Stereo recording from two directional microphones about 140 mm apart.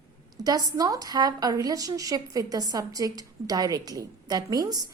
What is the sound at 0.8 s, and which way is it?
A woman's voice, 25° right (ahead or behind).